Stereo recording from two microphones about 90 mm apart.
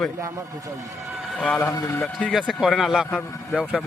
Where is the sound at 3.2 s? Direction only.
35° left (ahead or behind).